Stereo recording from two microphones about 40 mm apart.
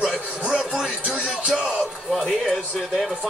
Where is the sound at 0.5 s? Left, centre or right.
Right.